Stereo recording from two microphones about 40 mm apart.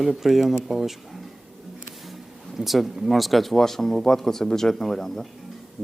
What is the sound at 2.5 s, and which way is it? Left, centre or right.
Speech, centre.